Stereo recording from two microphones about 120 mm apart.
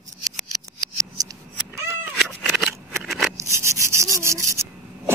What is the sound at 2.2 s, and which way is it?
Scissors, 5° right (ahead or behind).